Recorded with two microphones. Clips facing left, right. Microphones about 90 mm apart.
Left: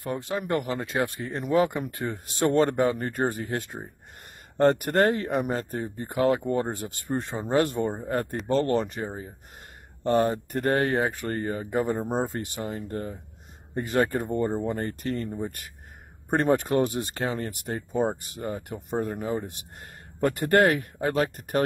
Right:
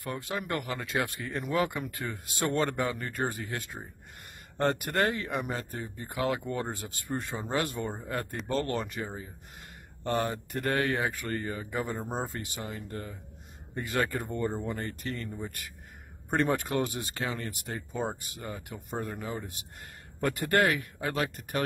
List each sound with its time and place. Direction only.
0.0 s speech: 35° left (ahead or behind)